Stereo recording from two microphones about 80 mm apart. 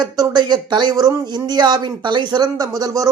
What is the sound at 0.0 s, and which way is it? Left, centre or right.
Speech, right.